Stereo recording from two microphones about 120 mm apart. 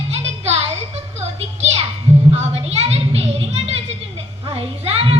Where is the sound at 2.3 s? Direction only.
60° right (ahead or behind).